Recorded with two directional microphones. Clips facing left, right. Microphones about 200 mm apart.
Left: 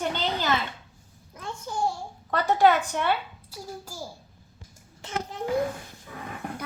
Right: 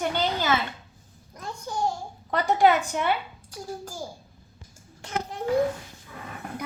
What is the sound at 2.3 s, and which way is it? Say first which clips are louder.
Speech: even; 15° right (ahead or behind).